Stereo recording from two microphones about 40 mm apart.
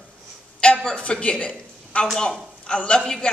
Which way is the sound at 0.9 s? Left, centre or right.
Left.